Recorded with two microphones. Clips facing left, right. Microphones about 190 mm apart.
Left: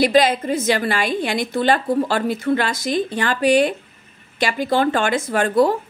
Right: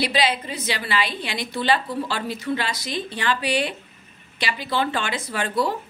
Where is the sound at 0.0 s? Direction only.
45° left (ahead or behind).